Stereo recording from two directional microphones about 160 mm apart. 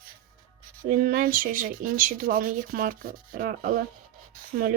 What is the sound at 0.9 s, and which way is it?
Speech, 60° right (ahead or behind).